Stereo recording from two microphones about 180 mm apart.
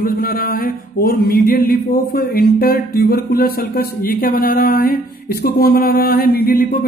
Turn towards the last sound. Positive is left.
turn(degrees=60)  # may be behind; listen again after turning